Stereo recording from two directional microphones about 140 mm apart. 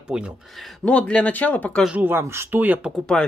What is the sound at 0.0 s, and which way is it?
Speech, 10° right (ahead or behind).